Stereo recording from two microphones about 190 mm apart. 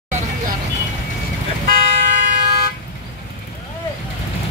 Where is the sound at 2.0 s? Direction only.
45° right (ahead or behind).